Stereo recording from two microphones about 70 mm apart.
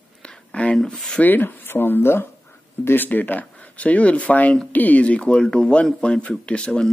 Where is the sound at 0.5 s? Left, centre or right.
Centre.